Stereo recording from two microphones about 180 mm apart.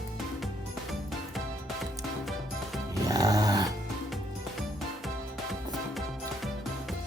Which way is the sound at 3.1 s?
20° right (ahead or behind).